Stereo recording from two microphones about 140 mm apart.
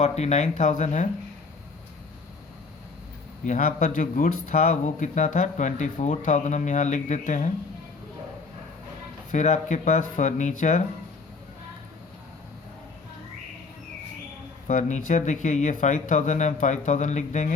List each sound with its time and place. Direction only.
0.0 s speech: 50° left (ahead or behind)
3.4 s speech: 65° left (ahead or behind)
9.3 s speech: 60° left (ahead or behind)
14.7 s speech: 60° left (ahead or behind)